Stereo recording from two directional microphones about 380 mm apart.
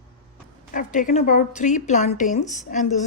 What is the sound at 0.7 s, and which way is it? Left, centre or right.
A woman's voice, centre.